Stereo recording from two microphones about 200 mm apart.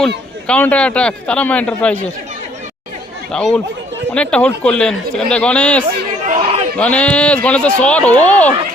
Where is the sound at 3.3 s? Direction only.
5° left (ahead or behind).